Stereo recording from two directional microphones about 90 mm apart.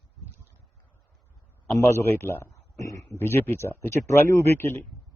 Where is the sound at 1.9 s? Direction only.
30° left (ahead or behind).